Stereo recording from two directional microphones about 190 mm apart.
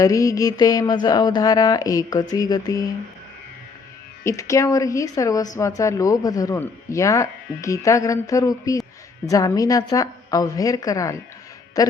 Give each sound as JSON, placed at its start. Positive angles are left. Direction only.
{"t": 0.0, "sound": "speech", "side_deg": 15}
{"t": 4.2, "sound": "a man's voice", "side_deg": 15}